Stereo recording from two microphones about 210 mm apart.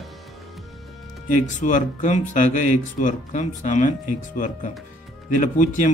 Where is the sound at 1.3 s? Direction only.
35° left (ahead or behind).